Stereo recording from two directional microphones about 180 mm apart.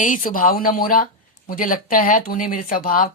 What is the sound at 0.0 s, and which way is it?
Speech, 45° left (ahead or behind).